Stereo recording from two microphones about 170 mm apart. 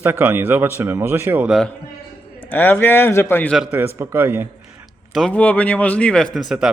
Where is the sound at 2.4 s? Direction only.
10° left (ahead or behind).